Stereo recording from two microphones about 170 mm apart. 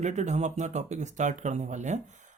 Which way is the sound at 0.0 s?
45° right (ahead or behind).